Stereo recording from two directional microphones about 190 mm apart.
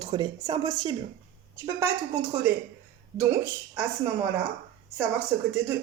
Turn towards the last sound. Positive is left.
turn(degrees=-10)  # may be behind; listen again after turning